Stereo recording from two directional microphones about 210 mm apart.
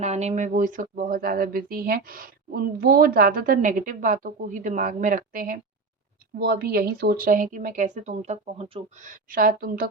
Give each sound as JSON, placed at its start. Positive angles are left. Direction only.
{"t": 0.0, "sound": "speech", "side_deg": -30}